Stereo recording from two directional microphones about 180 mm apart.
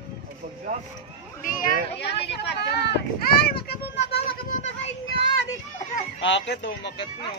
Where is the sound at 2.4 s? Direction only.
70° left (ahead or behind).